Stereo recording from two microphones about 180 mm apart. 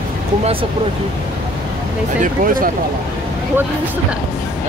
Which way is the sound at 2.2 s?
50° right (ahead or behind).